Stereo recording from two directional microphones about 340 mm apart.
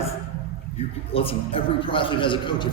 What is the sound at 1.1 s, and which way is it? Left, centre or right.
A man's voice, centre.